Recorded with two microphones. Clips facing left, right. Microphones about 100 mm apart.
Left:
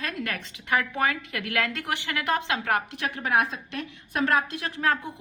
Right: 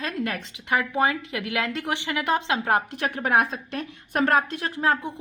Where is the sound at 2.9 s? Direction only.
40° right (ahead or behind).